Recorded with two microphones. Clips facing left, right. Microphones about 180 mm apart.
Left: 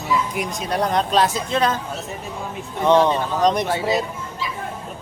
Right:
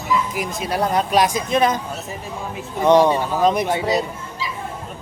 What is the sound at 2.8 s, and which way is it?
Speech, 10° right (ahead or behind).